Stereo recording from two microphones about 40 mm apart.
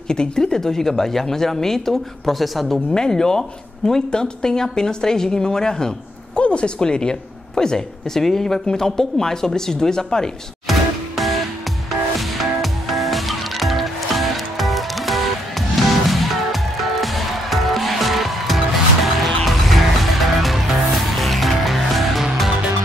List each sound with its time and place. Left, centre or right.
0.1 s a woman's voice: centre
2.9 s a woman's voice: centre
6.4 s a woman's voice: left
10.7 s music: centre